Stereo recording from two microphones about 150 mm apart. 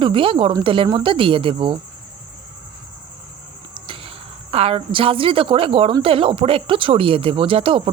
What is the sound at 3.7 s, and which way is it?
Speech, 35° right (ahead or behind).